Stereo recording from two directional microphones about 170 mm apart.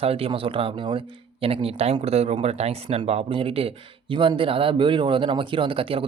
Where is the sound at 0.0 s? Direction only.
35° right (ahead or behind).